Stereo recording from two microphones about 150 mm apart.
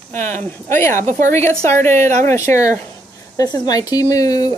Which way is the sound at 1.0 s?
20° left (ahead or behind).